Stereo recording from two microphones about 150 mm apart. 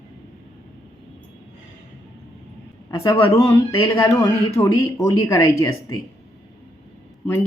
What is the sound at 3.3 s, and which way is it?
Speech, 20° left (ahead or behind).